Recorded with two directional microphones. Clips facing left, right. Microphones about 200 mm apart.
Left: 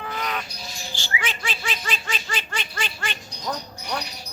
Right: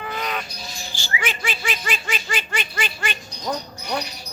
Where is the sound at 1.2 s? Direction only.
5° right (ahead or behind).